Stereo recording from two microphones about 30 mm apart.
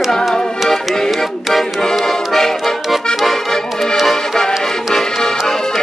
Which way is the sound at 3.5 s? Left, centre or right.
Centre.